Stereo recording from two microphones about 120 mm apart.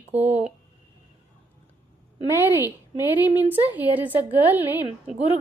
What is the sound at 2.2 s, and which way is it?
Speech, 20° right (ahead or behind).